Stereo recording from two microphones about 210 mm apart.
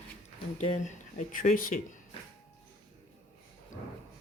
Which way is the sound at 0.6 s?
35° left (ahead or behind).